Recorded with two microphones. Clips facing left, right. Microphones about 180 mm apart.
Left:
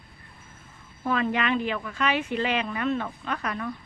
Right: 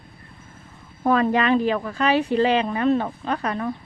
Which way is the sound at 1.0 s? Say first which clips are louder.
Right 7 dB; 40° right (ahead or behind).